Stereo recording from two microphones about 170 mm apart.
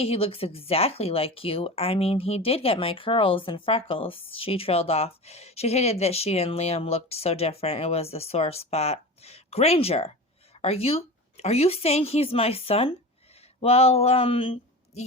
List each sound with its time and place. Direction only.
0.0 s speech: 35° left (ahead or behind)